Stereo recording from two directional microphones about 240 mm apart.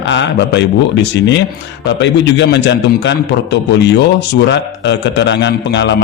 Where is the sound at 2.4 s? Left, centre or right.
Left.